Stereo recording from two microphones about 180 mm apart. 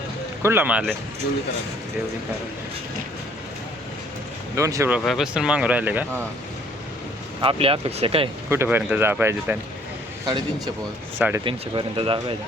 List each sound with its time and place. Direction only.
0.4 s speech: 10° right (ahead or behind)
4.5 s speech: 15° right (ahead or behind)
4.9 s speech: 5° right (ahead or behind)
7.4 s speech: 30° right (ahead or behind)
8.4 s speech: 15° right (ahead or behind)
11.2 s speech: 15° right (ahead or behind)
11.4 s speech: 30° right (ahead or behind)